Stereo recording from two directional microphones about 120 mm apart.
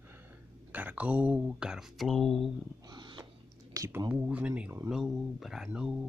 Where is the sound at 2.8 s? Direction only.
40° right (ahead or behind).